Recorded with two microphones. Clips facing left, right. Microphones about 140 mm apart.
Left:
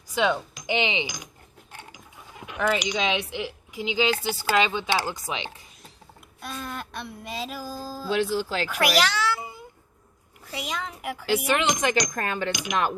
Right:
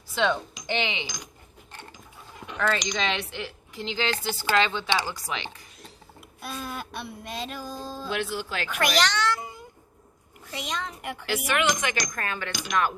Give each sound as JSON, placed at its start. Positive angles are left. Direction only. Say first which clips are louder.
{"t": 0.1, "sound": "speech", "louder": "left 1 dB", "side_deg": 10}
{"t": 0.8, "sound": "speech", "louder": "left 5 dB", "side_deg": 15}
{"t": 1.7, "sound": "mechanisms", "louder": "even", "side_deg": 10}
{"t": 2.5, "sound": "speech", "louder": "left 2 dB", "side_deg": 10}
{"t": 5.1, "sound": "speech", "louder": "left 1 dB", "side_deg": 20}
{"t": 6.4, "sound": "a sound", "louder": "even", "side_deg": -5}
{"t": 8.7, "sound": "meow", "louder": "left 1 dB", "side_deg": 5}
{"t": 10.4, "sound": "a sound", "louder": "left 1 dB", "side_deg": 5}
{"t": 11.5, "sound": "speech", "louder": "even", "side_deg": 30}
{"t": 12.5, "sound": "speech", "louder": "right 2 dB", "side_deg": 15}